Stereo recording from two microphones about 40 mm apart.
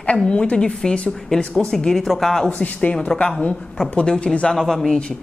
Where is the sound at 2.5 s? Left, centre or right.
Left.